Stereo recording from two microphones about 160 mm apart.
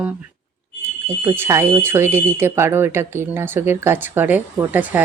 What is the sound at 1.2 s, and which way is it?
Speech, 15° right (ahead or behind).